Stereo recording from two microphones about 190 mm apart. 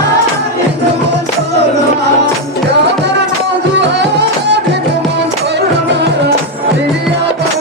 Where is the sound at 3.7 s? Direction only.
65° right (ahead or behind).